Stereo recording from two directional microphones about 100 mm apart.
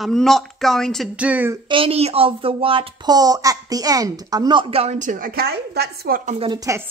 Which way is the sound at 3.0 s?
40° right (ahead or behind).